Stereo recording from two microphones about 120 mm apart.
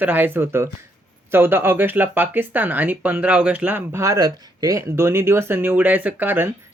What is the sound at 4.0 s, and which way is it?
Speech, 30° right (ahead or behind).